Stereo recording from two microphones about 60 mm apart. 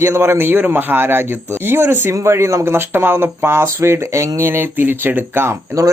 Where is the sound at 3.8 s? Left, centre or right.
Right.